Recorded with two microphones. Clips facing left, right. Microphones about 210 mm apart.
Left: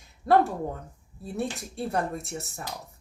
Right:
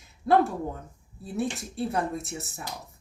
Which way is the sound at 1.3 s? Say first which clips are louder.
Right 2 dB; centre (ahead or behind).